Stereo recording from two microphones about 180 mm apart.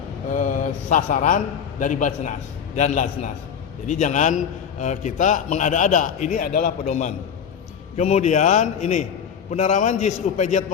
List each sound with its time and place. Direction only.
0.3 s a man's voice: 45° left (ahead or behind)